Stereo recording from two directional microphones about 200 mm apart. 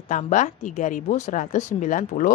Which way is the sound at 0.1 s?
35° left (ahead or behind).